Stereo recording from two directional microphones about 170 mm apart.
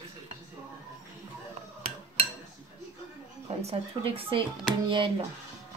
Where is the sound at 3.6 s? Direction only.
35° right (ahead or behind).